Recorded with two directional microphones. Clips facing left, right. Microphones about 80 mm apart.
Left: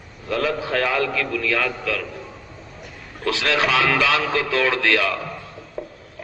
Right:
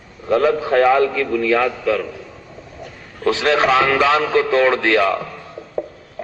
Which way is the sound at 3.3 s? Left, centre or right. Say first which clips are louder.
Right 5 dB; right.